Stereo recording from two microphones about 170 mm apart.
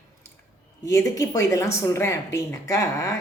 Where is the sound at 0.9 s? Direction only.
15° left (ahead or behind).